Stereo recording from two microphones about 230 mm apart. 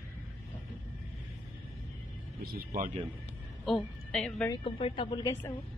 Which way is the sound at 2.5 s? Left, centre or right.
Right.